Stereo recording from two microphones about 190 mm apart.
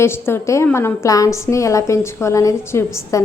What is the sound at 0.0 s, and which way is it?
A woman's voice, 15° left (ahead or behind).